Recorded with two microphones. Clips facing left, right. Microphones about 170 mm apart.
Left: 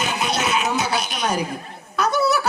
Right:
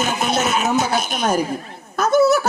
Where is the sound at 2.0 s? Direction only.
45° right (ahead or behind).